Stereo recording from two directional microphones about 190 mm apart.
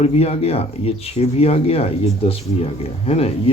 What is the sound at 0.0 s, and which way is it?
Speech, 30° left (ahead or behind).